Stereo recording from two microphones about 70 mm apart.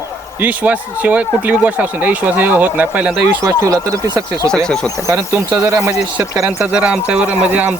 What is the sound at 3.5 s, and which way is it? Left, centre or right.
Speech, right.